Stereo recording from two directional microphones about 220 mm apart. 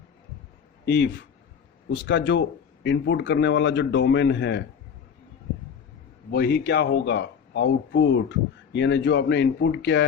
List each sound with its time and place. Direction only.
0.9 s speech: 50° left (ahead or behind)
6.3 s speech: 45° left (ahead or behind)